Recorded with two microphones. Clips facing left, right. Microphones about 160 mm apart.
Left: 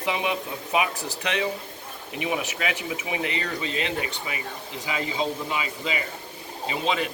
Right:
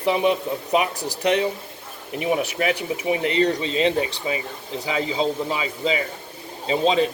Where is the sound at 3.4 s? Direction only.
35° right (ahead or behind).